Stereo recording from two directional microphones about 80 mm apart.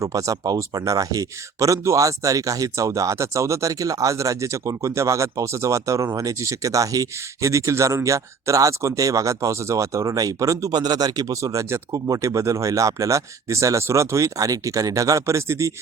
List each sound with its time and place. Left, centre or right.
0.0 s speech: right